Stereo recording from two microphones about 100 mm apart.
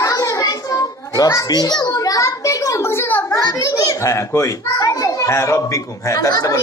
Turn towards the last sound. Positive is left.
turn(degrees=30)  # may be behind; listen again after turning